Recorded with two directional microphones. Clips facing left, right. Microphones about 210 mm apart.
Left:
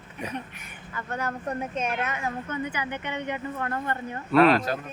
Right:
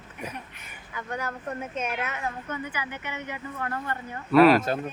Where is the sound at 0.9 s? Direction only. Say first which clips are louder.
Left 1 dB; 10° right (ahead or behind).